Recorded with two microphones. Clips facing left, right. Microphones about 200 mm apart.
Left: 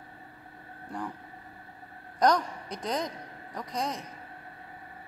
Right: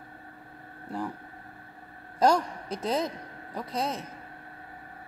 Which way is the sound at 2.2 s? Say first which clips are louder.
Right 1 dB; 30° right (ahead or behind).